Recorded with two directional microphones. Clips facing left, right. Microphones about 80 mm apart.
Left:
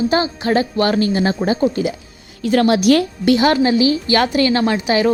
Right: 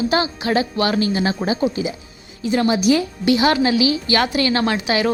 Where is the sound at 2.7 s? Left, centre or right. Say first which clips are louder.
Left 3 dB; left.